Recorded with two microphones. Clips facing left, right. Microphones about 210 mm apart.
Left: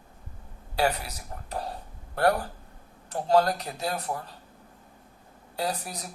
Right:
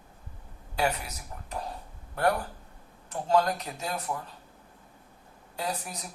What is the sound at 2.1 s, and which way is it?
Speech, 35° left (ahead or behind).